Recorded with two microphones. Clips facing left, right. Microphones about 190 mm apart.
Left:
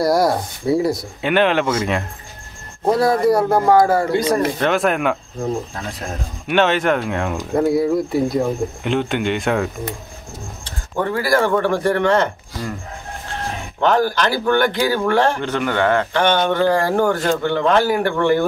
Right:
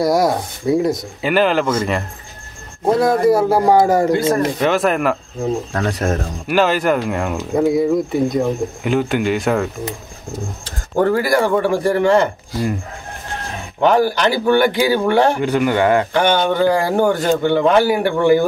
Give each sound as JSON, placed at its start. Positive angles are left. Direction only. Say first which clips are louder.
{"t": 0.0, "sound": "speech", "louder": "right 1 dB", "side_deg": 0}
{"t": 3.6, "sound": "speech", "louder": "right 1 dB", "side_deg": -15}
{"t": 4.6, "sound": "speech", "louder": "right 2 dB", "side_deg": 0}
{"t": 5.7, "sound": "speech", "louder": "right 9 dB", "side_deg": -75}
{"t": 6.4, "sound": "speech", "louder": "even", "side_deg": 0}
{"t": 11.1, "sound": "speech", "louder": "right 1 dB", "side_deg": -15}
{"t": 13.7, "sound": "speech", "louder": "right 2 dB", "side_deg": -10}